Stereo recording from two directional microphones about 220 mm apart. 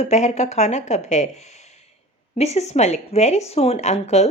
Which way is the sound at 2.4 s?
30° left (ahead or behind).